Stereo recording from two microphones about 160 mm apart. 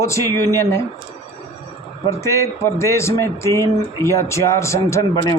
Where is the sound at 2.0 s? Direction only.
20° left (ahead or behind).